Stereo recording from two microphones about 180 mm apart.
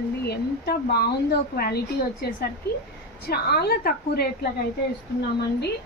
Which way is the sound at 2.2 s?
60° left (ahead or behind).